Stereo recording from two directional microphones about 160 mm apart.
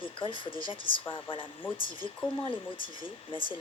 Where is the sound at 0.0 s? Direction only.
30° left (ahead or behind).